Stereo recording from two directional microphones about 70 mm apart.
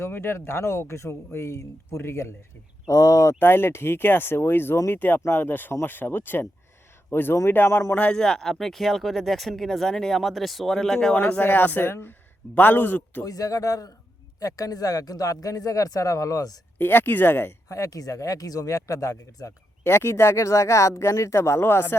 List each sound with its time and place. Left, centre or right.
0.0 s speech: left
2.8 s speech: left
3.4 s speech: left
7.9 s speech: centre
11.1 s speech: left
13.2 s speech: left
16.7 s speech: left
17.7 s speech: left
19.8 s speech: left